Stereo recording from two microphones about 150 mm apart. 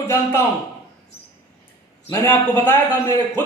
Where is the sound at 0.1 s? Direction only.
15° left (ahead or behind).